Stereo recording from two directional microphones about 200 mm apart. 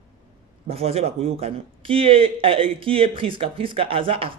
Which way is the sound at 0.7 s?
30° right (ahead or behind).